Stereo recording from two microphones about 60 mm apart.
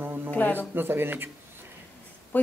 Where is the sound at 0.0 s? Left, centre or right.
Right.